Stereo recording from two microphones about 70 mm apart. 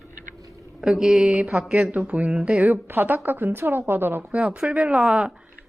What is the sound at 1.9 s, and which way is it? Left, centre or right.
A woman's voice, centre.